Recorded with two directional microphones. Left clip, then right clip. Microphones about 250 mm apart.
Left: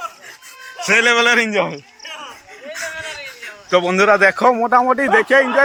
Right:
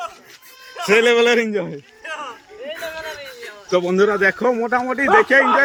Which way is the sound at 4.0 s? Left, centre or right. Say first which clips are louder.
Left 5 dB; centre.